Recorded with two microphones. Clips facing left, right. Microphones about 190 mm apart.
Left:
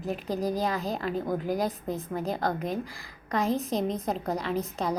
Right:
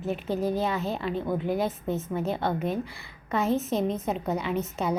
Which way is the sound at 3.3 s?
5° right (ahead or behind).